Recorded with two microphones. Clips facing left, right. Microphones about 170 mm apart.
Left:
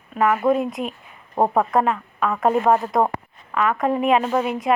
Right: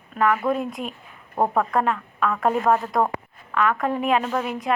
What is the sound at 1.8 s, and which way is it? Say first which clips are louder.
Speech: left 2 dB; centre (ahead or behind).